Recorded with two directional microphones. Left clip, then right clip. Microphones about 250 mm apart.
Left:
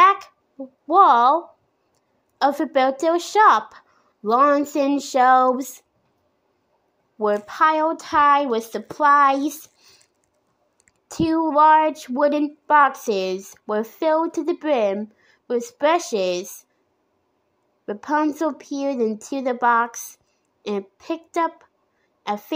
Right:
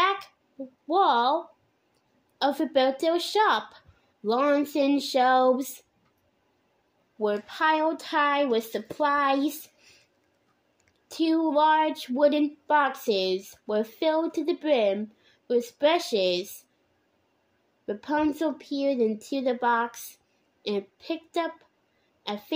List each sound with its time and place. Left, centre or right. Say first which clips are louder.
0.0 s a sound: left 10 dB; centre
0.8 s speech: left 8 dB; centre
3.7 s a sound: left 7 dB; centre
7.2 s speech: left 8 dB; centre
11.1 s speech: left 4 dB; centre
17.8 s a woman's voice: left 5 dB; centre